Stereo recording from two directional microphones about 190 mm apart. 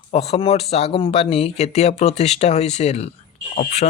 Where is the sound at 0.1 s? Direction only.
35° left (ahead or behind).